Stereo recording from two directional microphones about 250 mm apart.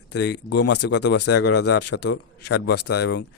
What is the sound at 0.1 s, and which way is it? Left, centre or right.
Speech, left.